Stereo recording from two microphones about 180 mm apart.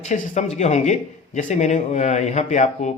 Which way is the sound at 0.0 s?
40° left (ahead or behind).